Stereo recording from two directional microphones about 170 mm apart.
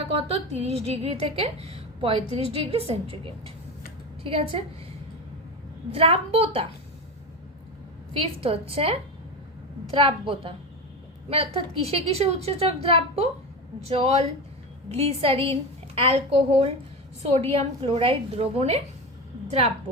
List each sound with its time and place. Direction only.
0.1 s a woman's voice: 35° right (ahead or behind)
5.9 s a woman's voice: 35° right (ahead or behind)
8.2 s a woman's voice: 35° right (ahead or behind)